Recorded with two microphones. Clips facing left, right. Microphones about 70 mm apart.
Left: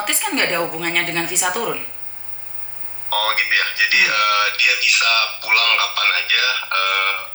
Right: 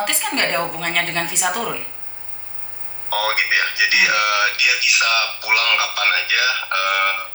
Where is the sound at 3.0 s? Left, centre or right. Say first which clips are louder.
Even; left.